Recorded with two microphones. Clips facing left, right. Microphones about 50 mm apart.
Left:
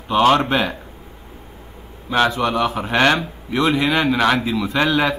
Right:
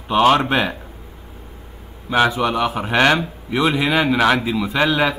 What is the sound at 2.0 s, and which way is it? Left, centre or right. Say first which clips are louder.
Speech: right 1 dB; centre.